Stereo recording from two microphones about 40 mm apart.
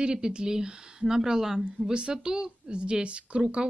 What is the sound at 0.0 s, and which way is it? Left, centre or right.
Speech, right.